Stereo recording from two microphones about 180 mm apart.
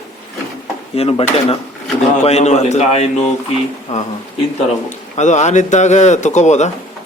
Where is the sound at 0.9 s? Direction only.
35° left (ahead or behind).